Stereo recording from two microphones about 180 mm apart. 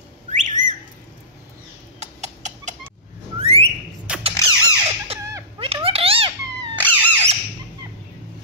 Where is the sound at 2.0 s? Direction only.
40° right (ahead or behind).